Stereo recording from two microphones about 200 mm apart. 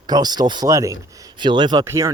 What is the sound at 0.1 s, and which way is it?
Speech, 20° right (ahead or behind).